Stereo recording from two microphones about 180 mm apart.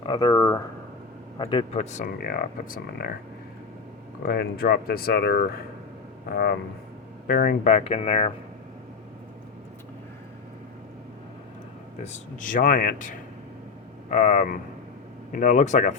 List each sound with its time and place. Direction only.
0.0 s a sound: 25° left (ahead or behind)
1.4 s speech: 30° left (ahead or behind); by 3.2 s 55° left (ahead or behind)
4.3 s speech: 60° left (ahead or behind); by 8.3 s 35° left (ahead or behind)
12.0 s speech: 45° left (ahead or behind)